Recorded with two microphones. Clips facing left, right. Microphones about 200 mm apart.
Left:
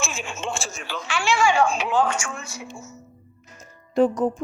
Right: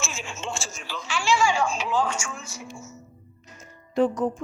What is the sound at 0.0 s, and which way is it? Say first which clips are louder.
Speech: left 4 dB; 55° left (ahead or behind).